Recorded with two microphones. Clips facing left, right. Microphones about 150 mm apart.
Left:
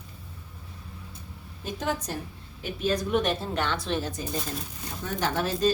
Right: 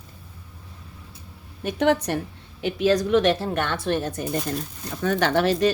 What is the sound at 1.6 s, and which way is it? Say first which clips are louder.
Speech: right 10 dB; 70° right (ahead or behind).